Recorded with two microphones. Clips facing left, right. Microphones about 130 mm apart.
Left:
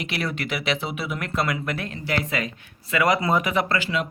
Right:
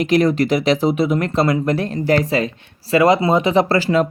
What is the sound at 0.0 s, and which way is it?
Speech, 40° right (ahead or behind).